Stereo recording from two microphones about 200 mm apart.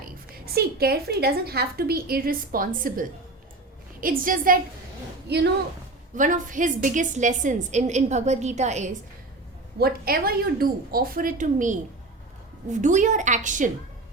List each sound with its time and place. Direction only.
0.0 s a woman's voice: 50° right (ahead or behind)
5.3 s a woman's voice: 55° right (ahead or behind)
6.1 s a woman's voice: 40° right (ahead or behind)
9.7 s a woman's voice: 50° right (ahead or behind)